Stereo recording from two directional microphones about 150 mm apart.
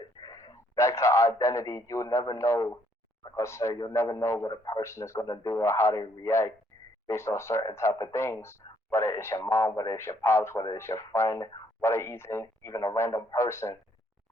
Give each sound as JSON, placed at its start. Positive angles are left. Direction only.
{"t": 0.0, "sound": "a man's voice", "side_deg": 25}